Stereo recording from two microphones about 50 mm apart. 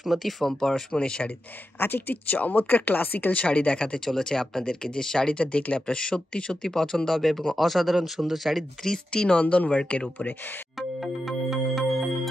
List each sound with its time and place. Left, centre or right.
0.0 s speech: centre
1.8 s speech: left
2.3 s speech: left
3.3 s speech: left
10.8 s music: centre